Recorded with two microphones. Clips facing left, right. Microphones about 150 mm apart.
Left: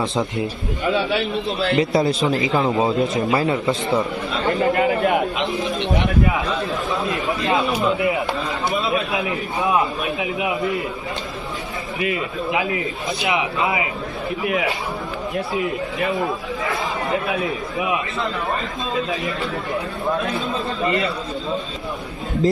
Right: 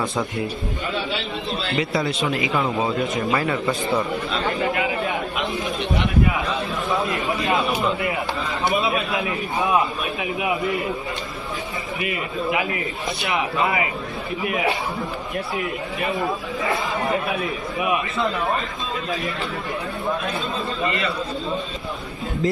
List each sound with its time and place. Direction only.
0.0 s a man's voice: 25° left (ahead or behind)
1.7 s a man's voice: 25° left (ahead or behind)
4.6 s a sound: 45° left (ahead or behind)
10.6 s a man's voice: centre (ahead or behind)
13.2 s a man's voice: 20° left (ahead or behind)